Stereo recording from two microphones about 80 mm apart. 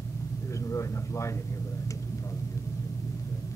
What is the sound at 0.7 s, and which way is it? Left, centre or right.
Speech, left.